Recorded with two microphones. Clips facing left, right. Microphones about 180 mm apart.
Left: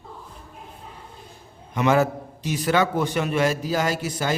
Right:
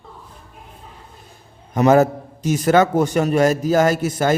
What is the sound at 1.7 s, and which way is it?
A man's voice, 40° right (ahead or behind).